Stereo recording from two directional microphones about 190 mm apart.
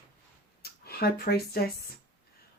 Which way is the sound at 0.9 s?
55° left (ahead or behind).